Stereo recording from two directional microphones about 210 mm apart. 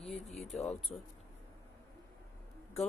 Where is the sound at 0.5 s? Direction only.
Centre (ahead or behind).